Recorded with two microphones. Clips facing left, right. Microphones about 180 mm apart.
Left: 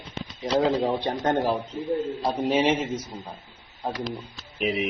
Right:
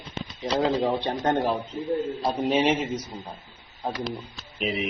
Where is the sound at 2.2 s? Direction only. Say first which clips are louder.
Even; centre (ahead or behind).